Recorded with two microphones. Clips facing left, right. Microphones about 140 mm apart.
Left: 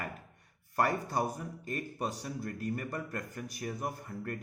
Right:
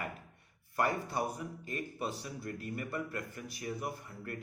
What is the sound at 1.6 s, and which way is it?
A man's voice, 40° left (ahead or behind).